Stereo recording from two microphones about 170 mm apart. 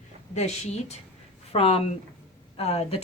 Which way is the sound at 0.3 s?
40° left (ahead or behind).